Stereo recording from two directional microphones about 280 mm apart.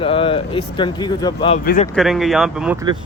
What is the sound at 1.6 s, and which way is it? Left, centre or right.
Speech, left.